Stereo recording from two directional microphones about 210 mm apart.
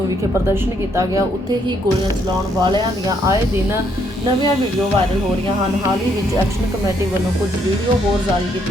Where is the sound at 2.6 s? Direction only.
20° right (ahead or behind).